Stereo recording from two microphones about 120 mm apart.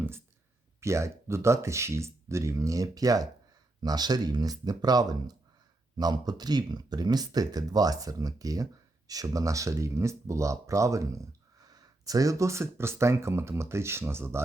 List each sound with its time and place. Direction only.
0.8 s speech: 25° right (ahead or behind)